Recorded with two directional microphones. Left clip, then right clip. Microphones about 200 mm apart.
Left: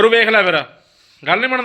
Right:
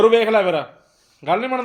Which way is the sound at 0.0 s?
5° left (ahead or behind).